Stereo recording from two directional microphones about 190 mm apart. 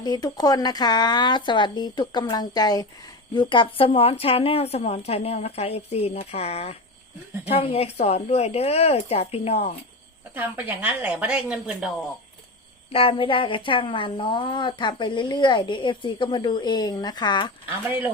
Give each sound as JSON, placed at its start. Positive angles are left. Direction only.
{"t": 0.0, "sound": "a woman's voice", "side_deg": 20}
{"t": 10.3, "sound": "a woman's voice", "side_deg": -10}
{"t": 12.9, "sound": "a woman's voice", "side_deg": 30}
{"t": 17.7, "sound": "a woman's voice", "side_deg": -10}